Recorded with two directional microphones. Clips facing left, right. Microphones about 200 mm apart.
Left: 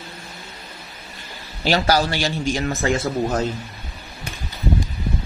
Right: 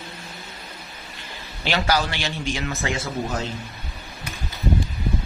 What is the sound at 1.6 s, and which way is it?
Speech, 40° left (ahead or behind).